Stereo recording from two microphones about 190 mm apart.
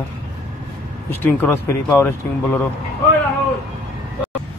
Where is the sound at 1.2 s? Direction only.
10° left (ahead or behind).